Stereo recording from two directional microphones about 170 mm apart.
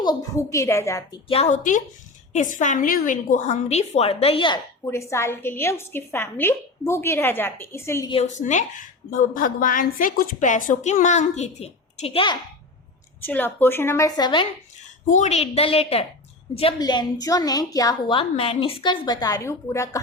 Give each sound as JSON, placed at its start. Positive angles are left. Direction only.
{"t": 0.0, "sound": "a woman's voice", "side_deg": 20}
{"t": 1.3, "sound": "a woman's voice", "side_deg": 40}
{"t": 4.9, "sound": "a woman's voice", "side_deg": 15}
{"t": 8.1, "sound": "a woman's voice", "side_deg": 40}
{"t": 13.2, "sound": "a woman's voice", "side_deg": 10}
{"t": 15.1, "sound": "a woman's voice", "side_deg": 40}